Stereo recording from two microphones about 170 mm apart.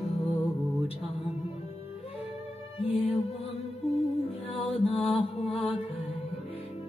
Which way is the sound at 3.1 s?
35° left (ahead or behind).